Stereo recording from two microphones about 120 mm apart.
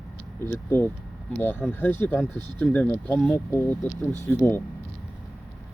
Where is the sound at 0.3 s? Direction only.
20° left (ahead or behind).